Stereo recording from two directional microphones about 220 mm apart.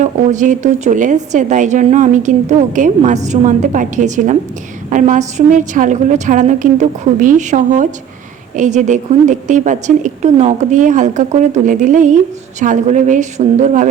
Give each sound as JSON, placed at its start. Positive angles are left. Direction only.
{"t": 0.0, "sound": "a woman's voice", "side_deg": -35}